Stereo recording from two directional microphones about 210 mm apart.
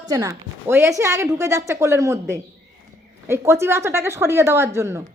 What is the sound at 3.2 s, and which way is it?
A woman's voice, 10° right (ahead or behind).